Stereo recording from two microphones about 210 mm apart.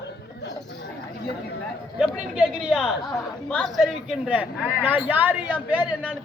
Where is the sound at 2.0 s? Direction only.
5° right (ahead or behind).